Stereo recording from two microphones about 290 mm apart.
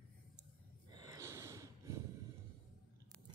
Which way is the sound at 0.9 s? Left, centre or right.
Centre.